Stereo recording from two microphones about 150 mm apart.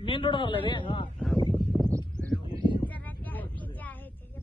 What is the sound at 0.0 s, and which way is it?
Speech, 35° left (ahead or behind).